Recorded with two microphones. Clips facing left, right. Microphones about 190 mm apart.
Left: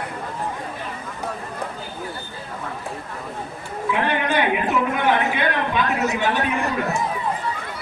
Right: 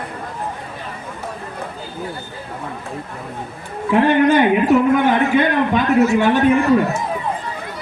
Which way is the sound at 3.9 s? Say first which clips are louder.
Right 9 dB; 45° right (ahead or behind).